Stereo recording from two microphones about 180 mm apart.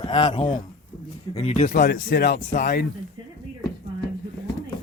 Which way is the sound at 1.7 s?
60° left (ahead or behind).